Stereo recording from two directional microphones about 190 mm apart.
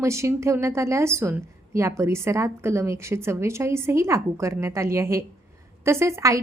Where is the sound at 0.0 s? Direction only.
15° right (ahead or behind).